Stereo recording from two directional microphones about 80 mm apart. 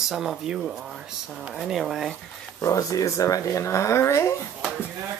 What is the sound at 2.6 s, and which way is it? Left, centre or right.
Speech, left.